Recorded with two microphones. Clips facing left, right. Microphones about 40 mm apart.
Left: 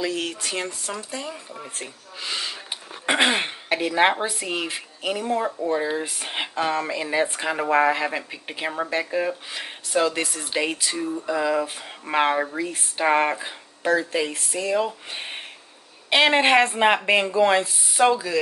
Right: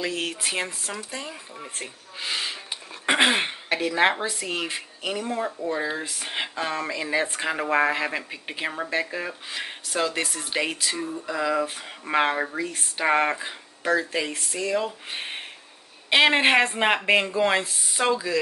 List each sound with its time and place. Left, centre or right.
0.0 s speech: centre
3.8 s speech: centre
6.8 s speech: centre
10.7 s speech: centre
12.6 s speech: centre
13.0 s speech: centre
14.9 s speech: centre